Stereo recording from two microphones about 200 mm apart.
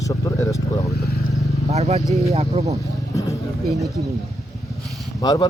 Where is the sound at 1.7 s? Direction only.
35° right (ahead or behind).